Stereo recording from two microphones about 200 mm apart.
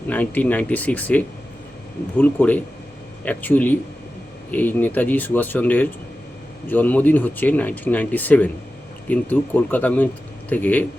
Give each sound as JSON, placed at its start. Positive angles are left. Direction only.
{"t": 0.1, "sound": "speech", "side_deg": 10}